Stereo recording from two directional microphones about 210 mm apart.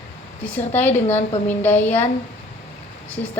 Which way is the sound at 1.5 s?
10° left (ahead or behind).